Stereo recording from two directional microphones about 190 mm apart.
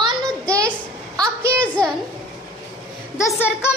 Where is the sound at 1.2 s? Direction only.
15° right (ahead or behind).